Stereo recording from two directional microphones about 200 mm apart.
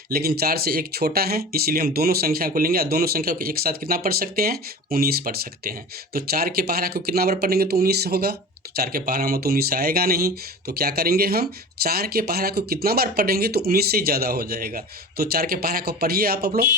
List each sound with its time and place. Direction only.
0.1 s speech: 50° right (ahead or behind)